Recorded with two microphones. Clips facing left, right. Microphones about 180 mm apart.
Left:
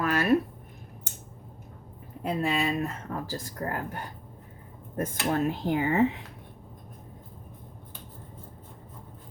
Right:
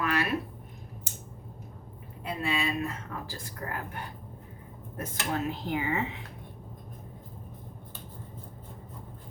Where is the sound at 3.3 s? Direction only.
40° left (ahead or behind).